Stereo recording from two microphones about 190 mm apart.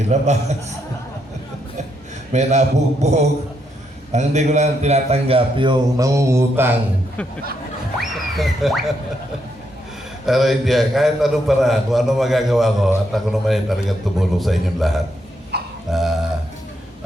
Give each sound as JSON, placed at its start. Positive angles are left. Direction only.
{"t": 0.1, "sound": "a man's voice", "side_deg": -35}
{"t": 2.3, "sound": "a man's voice", "side_deg": -35}
{"t": 7.9, "sound": "a man's voice", "side_deg": 0}
{"t": 10.2, "sound": "a man's voice", "side_deg": 0}
{"t": 15.5, "sound": "a sound", "side_deg": -60}
{"t": 15.9, "sound": "a sound", "side_deg": 0}